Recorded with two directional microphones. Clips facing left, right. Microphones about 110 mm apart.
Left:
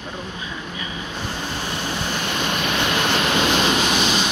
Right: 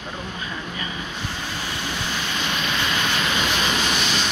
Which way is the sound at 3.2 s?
30° left (ahead or behind).